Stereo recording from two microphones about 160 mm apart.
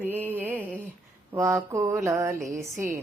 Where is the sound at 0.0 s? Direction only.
10° right (ahead or behind).